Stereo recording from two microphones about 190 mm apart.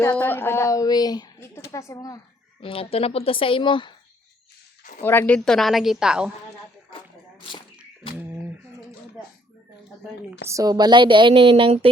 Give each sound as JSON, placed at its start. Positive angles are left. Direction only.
{"t": 0.0, "sound": "speech", "side_deg": 10}
{"t": 2.6, "sound": "a woman's voice", "side_deg": 30}
{"t": 4.8, "sound": "a sound", "side_deg": 40}
{"t": 5.0, "sound": "a woman's voice", "side_deg": 10}
{"t": 8.1, "sound": "a sound", "side_deg": -10}
{"t": 10.5, "sound": "speech", "side_deg": -20}